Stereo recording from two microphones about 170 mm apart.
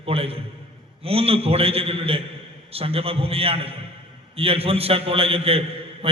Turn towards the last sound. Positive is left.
turn(degrees=-35)  # may be behind; listen again after turning